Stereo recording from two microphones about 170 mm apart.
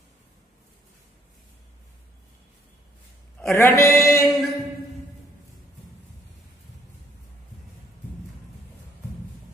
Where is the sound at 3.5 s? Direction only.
15° left (ahead or behind).